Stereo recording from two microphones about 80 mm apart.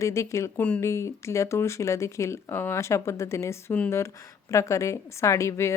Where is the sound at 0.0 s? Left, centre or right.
Left.